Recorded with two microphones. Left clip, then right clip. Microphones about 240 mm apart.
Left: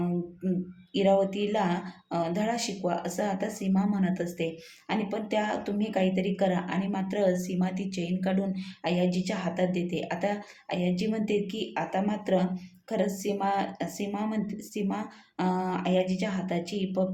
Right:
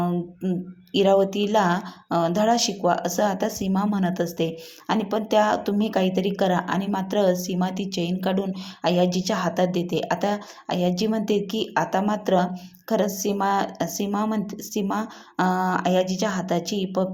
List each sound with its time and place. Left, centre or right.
0.9 s speech: right